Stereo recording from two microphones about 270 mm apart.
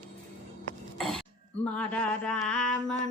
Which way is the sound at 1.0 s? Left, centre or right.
Centre.